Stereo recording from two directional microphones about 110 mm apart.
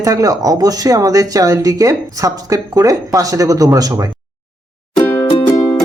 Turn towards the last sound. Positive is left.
turn(degrees=25)  # may be behind; listen again after turning